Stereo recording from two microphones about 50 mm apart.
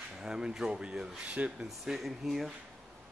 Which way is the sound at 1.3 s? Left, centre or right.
Right.